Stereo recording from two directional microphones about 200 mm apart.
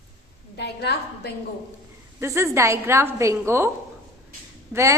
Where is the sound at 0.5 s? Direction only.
55° left (ahead or behind).